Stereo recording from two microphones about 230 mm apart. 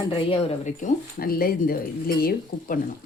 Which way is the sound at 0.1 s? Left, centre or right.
Left.